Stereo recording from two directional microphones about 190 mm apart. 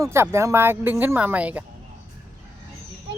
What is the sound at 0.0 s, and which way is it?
Speech, 15° right (ahead or behind).